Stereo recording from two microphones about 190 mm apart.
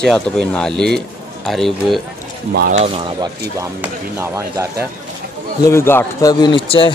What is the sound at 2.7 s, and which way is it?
Speech, 35° right (ahead or behind).